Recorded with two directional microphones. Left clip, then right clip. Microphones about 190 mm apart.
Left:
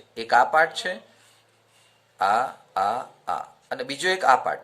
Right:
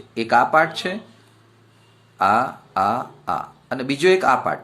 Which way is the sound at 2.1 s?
15° left (ahead or behind).